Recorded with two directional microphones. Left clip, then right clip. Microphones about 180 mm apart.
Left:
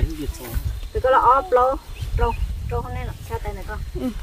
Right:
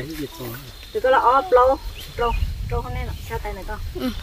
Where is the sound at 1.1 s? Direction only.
30° right (ahead or behind).